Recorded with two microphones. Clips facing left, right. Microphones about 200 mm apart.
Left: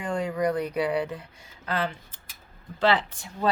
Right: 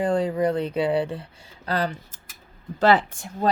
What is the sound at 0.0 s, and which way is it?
Speech, 35° right (ahead or behind).